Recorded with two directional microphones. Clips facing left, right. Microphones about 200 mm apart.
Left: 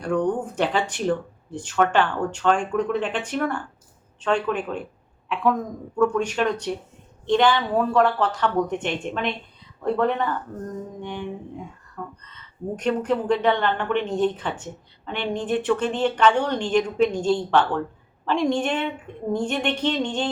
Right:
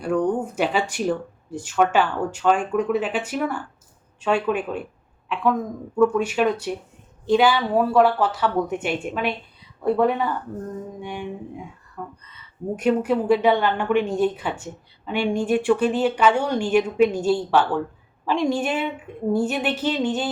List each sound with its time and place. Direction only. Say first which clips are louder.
0.0 s a woman's voice: right 1 dB; 5° right (ahead or behind)